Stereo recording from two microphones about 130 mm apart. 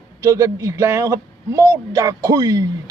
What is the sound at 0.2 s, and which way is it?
Speech, 25° right (ahead or behind).